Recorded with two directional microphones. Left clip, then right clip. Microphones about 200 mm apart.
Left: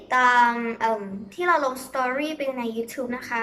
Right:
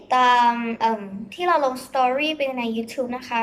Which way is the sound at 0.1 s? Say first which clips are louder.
Right 2 dB; 10° right (ahead or behind).